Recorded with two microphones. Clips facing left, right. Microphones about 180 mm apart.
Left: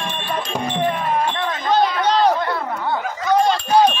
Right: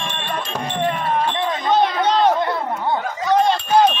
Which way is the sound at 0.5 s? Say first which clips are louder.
Left 1 dB; 10° left (ahead or behind).